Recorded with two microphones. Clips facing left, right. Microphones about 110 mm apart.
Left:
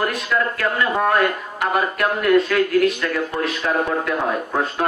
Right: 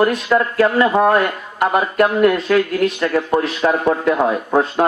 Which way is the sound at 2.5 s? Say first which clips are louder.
Right 1 dB; 30° right (ahead or behind).